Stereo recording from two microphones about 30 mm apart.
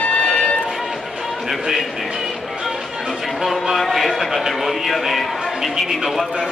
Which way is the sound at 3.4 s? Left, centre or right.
Centre.